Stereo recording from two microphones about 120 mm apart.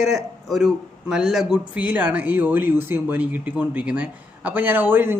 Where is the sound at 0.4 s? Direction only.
Centre (ahead or behind).